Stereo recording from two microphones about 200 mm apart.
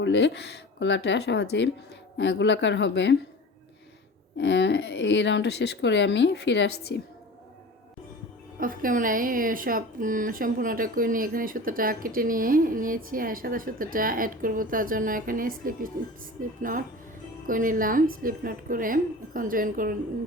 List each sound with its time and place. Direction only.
0.0 s speech: 65° left (ahead or behind)
4.4 s speech: 60° left (ahead or behind)
8.5 s a woman's voice: 45° right (ahead or behind)
17.4 s a woman's voice: 45° right (ahead or behind)